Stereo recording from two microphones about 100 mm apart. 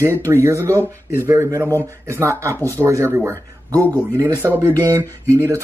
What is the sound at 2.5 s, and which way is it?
Speech, 20° left (ahead or behind).